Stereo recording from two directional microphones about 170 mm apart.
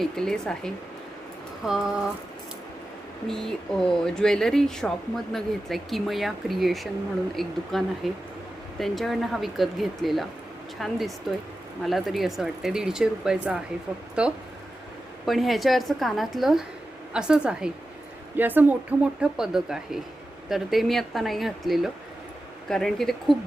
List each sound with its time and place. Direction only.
0.0 s speech: 5° left (ahead or behind)
3.2 s speech: centre (ahead or behind)